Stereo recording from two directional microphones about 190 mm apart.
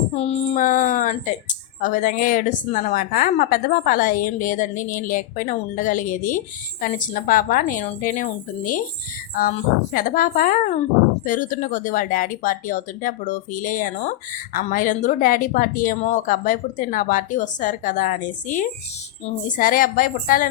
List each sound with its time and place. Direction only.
0.1 s speech: 35° left (ahead or behind)